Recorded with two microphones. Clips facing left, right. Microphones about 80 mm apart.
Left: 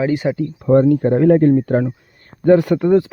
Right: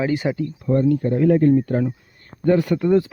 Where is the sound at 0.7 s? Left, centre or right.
Left.